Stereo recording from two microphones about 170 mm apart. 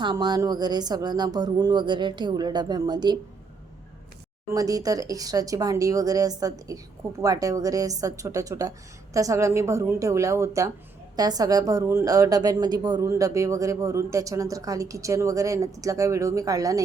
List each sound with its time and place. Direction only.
0.0 s a woman's voice: 25° right (ahead or behind)
4.5 s a woman's voice: 20° right (ahead or behind)